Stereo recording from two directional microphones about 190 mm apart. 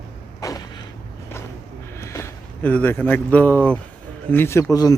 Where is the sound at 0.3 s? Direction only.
20° left (ahead or behind).